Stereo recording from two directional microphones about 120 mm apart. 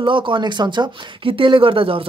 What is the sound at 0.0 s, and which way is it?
Speech, 45° right (ahead or behind).